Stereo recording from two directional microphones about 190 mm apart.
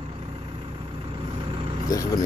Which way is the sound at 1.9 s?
20° left (ahead or behind).